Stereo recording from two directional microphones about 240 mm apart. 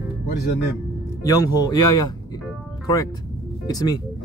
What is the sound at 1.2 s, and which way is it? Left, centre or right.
Speech, centre.